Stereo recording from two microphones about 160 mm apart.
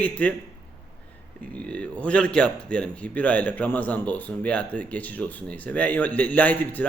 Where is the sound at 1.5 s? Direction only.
5° left (ahead or behind).